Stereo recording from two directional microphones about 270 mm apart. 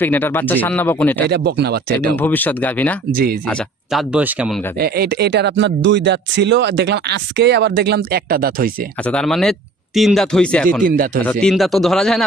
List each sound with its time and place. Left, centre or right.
0.0 s speech: centre
1.3 s speech: right
2.0 s speech: centre
3.1 s speech: right
3.4 s speech: centre
4.7 s speech: right
9.0 s speech: centre
10.8 s speech: right
11.2 s speech: centre